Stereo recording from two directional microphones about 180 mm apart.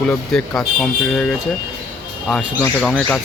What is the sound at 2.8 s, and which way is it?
Speech, centre (ahead or behind).